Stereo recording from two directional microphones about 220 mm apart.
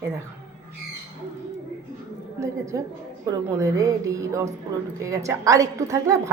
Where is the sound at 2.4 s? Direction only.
15° right (ahead or behind).